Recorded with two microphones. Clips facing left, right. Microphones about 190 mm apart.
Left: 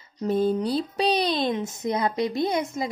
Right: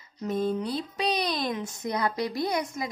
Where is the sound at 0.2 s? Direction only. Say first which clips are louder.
Left 5 dB; 30° left (ahead or behind).